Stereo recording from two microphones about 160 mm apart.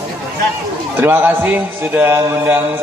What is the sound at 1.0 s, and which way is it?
Music, 15° right (ahead or behind).